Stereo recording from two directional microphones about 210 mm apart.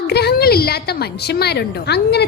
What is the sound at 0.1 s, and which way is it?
A woman's voice, 50° left (ahead or behind).